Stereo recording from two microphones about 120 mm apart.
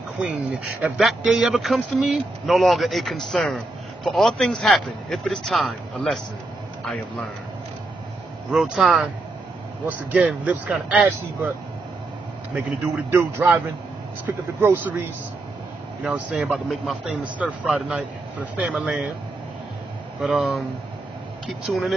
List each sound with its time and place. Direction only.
0.2 s speech: 10° right (ahead or behind)
8.5 s speech: 5° right (ahead or behind)
10.4 s speech: 10° right (ahead or behind)
13.1 s speech: 20° right (ahead or behind)
20.2 s speech: centre (ahead or behind)
21.6 s speech: centre (ahead or behind)